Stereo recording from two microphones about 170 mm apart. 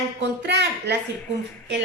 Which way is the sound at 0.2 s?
90° right.